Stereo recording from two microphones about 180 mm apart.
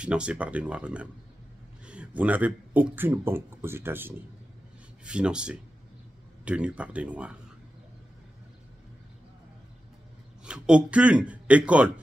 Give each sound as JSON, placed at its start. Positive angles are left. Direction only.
{"t": 0.0, "sound": "a man's voice", "side_deg": -5}
{"t": 10.4, "sound": "a man's voice", "side_deg": -5}